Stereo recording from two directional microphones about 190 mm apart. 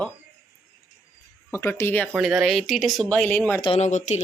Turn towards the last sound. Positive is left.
turn(degrees=35)  # may be behind; listen again after turning